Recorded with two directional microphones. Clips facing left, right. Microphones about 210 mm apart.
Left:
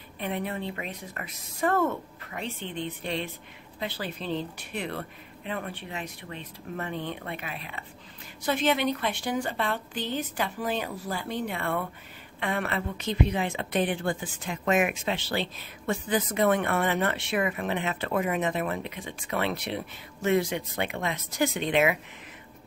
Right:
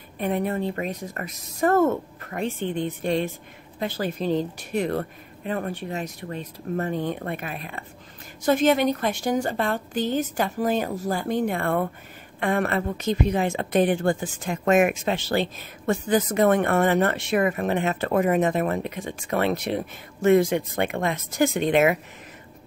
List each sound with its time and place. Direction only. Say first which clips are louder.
0.2 s speech: right 7 dB; 45° right (ahead or behind)